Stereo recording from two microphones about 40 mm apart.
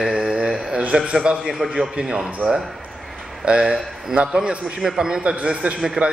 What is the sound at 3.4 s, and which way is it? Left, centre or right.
A man's voice, right.